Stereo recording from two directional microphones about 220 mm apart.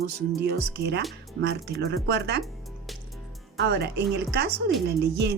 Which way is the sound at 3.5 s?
50° right (ahead or behind).